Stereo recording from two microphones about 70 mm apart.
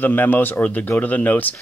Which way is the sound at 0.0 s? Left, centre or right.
Left.